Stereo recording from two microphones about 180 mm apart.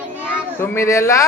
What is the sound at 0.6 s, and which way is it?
Speech, 15° left (ahead or behind).